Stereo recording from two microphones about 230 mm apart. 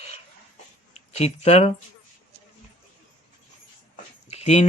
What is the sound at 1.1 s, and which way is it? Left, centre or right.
Speech, left.